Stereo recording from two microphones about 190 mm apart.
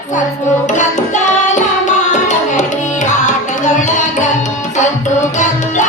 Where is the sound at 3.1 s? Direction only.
40° left (ahead or behind).